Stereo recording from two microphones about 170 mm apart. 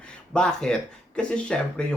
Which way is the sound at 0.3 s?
5° left (ahead or behind).